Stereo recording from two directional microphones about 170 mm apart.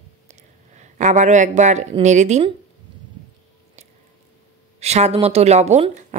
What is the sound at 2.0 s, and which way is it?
Speech, 45° right (ahead or behind).